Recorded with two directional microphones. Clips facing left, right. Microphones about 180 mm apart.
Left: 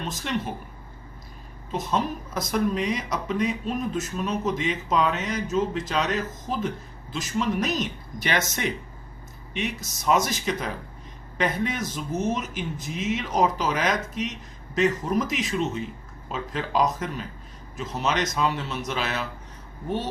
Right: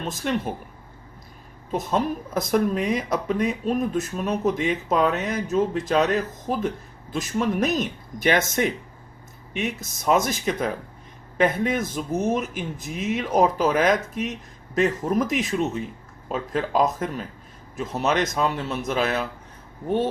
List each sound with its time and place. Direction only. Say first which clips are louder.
0.0 s speech: right 4 dB; 50° right (ahead or behind)
1.7 s speech: right 3 dB; 50° right (ahead or behind)
7.1 s speech: right 2 dB; 50° right (ahead or behind)